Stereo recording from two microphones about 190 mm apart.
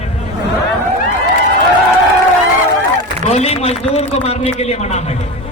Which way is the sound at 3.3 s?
35° left (ahead or behind).